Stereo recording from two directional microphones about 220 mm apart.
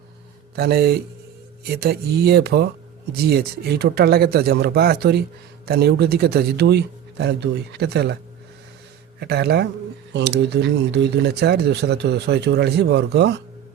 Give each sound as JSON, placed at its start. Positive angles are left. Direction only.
{"t": 0.5, "sound": "speech", "side_deg": -45}
{"t": 9.2, "sound": "speech", "side_deg": -45}